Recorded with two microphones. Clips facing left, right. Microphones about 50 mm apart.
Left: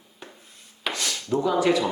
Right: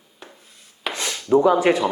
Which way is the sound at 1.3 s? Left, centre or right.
Right.